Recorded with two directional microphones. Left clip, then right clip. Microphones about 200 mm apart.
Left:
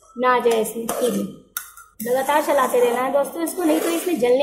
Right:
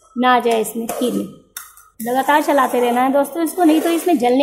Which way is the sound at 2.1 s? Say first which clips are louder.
Right 4 dB; 35° right (ahead or behind).